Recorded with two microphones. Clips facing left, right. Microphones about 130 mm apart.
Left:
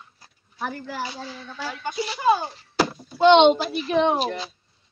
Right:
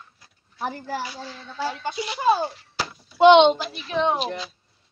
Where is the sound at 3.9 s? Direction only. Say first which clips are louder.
Left 2 dB; 45° left (ahead or behind).